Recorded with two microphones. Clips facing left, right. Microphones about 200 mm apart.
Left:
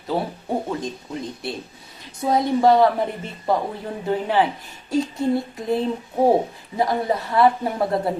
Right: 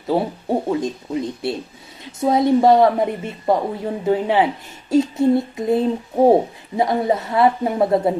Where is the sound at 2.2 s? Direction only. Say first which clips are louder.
Right 3 dB; 20° right (ahead or behind).